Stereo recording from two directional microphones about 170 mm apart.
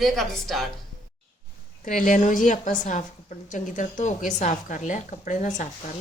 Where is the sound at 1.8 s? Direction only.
50° left (ahead or behind).